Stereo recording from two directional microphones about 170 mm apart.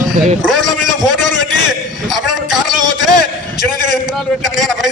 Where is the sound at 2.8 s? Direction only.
25° right (ahead or behind).